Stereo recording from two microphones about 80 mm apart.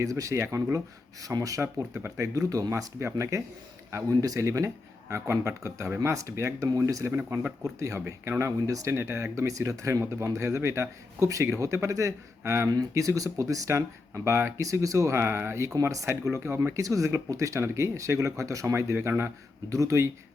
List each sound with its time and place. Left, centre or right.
0.0 s speech: right
9.5 s speech: right
10.0 s speech: right
15.7 s speech: right